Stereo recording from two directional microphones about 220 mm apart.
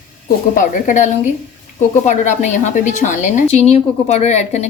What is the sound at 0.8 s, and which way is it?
A woman's voice, 35° left (ahead or behind).